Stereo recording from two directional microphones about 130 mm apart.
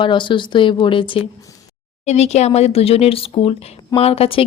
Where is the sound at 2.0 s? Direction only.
55° left (ahead or behind).